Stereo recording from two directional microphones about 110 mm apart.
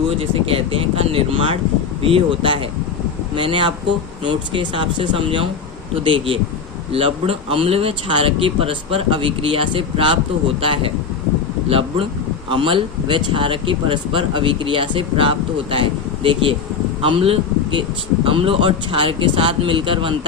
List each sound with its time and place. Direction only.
0.2 s speech: 60° right (ahead or behind)